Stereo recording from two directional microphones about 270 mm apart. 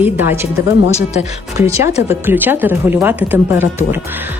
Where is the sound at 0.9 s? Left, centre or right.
Left.